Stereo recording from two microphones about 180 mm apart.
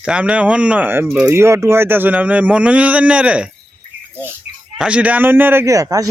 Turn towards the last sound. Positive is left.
turn(degrees=-20)  # may be behind; listen again after turning